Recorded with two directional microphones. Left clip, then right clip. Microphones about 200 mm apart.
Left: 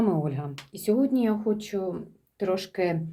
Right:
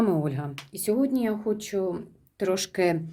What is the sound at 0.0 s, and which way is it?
Speech, 25° right (ahead or behind).